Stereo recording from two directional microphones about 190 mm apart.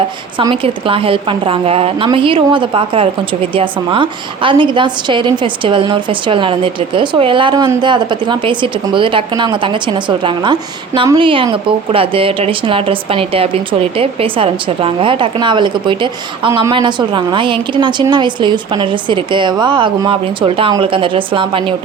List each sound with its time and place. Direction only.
0.3 s a woman's voice: 25° right (ahead or behind)